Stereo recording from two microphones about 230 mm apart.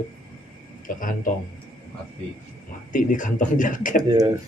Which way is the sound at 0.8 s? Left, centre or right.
Left.